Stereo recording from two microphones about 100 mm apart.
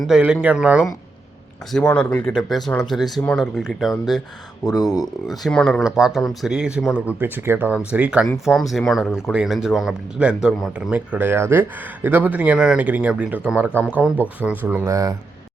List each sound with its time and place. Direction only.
0.0 s speech: 5° right (ahead or behind)
1.7 s speech: 10° left (ahead or behind)
4.6 s speech: 40° left (ahead or behind)
5.4 s speech: 5° left (ahead or behind)
5.8 s speech: 5° right (ahead or behind)
8.4 s speech: centre (ahead or behind); by 14.8 s 20° right (ahead or behind)
14.8 s speech: 35° right (ahead or behind)